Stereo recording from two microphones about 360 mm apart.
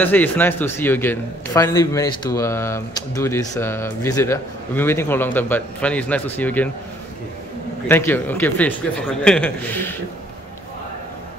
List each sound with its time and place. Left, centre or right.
0.0 s a man's voice: centre
7.9 s speech: centre